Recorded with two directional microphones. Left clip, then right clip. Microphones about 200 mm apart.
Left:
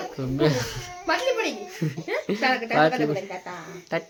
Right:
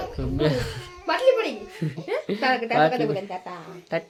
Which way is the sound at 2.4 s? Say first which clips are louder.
Right 1 dB; 20° right (ahead or behind).